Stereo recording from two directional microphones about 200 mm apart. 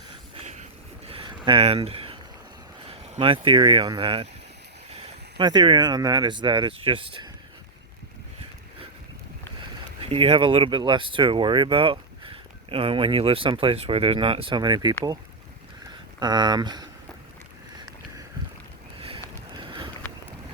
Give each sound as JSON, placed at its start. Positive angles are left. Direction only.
{"t": 0.3, "sound": "vehicle", "side_deg": -35}
{"t": 1.0, "sound": "a sound", "side_deg": -30}
{"t": 1.5, "sound": "speech", "side_deg": -30}
{"t": 10.0, "sound": "speech", "side_deg": -30}
{"t": 18.9, "sound": "vehicle", "side_deg": -25}